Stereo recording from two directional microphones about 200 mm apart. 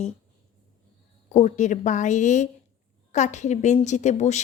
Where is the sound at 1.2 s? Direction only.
35° left (ahead or behind).